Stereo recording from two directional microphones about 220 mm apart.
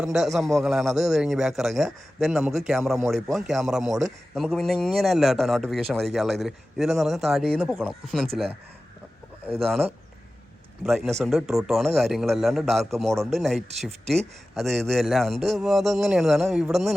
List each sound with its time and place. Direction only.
0.0 s a man's voice: centre (ahead or behind)
9.5 s speech: 25° right (ahead or behind)
10.8 s a man's voice: centre (ahead or behind)